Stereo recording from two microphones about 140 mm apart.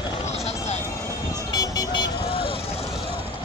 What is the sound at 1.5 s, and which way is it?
Vehicle, 30° left (ahead or behind).